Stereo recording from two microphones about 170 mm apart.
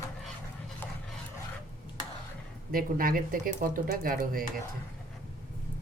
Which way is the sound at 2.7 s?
55° right (ahead or behind).